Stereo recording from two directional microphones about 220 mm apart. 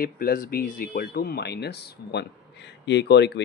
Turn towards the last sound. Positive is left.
turn(degrees=50)  # may be behind; listen again after turning